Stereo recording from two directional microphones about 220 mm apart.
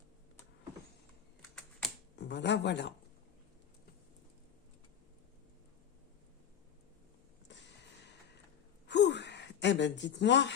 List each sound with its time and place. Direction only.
2.1 s speech: 50° left (ahead or behind)
7.4 s a sound: 55° left (ahead or behind)
8.9 s gasp: 50° left (ahead or behind)